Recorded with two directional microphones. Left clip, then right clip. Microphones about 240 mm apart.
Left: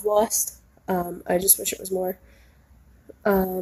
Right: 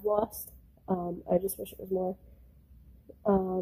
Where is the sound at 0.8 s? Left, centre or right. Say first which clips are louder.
Left 6 dB; centre.